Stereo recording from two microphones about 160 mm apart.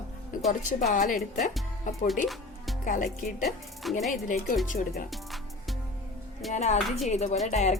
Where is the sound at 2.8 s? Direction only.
55° left (ahead or behind).